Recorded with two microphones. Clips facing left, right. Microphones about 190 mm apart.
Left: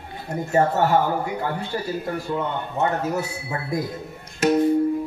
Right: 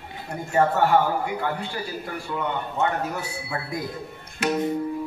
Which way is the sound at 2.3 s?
35° left (ahead or behind).